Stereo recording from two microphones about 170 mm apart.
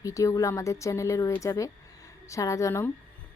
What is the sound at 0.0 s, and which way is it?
A woman's voice, 20° left (ahead or behind).